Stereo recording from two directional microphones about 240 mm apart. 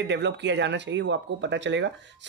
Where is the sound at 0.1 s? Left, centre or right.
Right.